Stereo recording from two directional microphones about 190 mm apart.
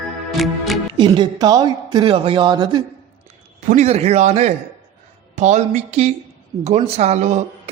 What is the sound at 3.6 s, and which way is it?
A man's voice, 40° right (ahead or behind).